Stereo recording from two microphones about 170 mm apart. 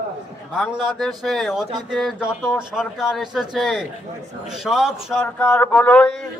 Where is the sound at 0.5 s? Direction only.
5° right (ahead or behind).